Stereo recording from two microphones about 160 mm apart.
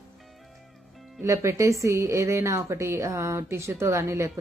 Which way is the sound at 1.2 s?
15° right (ahead or behind).